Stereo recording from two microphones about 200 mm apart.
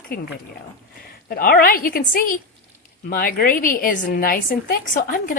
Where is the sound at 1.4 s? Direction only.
45° left (ahead or behind).